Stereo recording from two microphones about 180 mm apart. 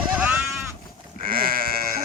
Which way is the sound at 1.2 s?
55° right (ahead or behind).